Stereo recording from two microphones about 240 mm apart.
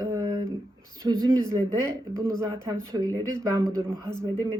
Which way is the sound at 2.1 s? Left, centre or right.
Centre.